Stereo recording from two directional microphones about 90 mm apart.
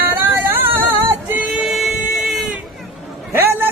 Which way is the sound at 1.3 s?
15° right (ahead or behind).